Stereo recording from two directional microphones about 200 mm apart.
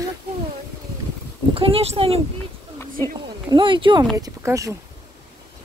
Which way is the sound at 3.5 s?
25° right (ahead or behind).